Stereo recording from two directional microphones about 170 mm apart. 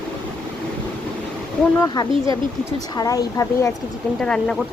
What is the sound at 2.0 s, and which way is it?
Speech, 25° left (ahead or behind).